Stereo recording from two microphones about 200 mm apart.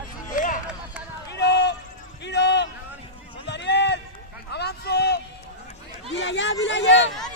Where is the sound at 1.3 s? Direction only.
55° left (ahead or behind).